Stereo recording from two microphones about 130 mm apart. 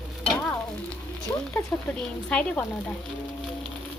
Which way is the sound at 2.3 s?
5° left (ahead or behind).